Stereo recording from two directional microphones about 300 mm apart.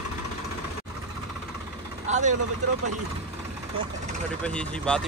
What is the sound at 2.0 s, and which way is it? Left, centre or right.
Speech, right.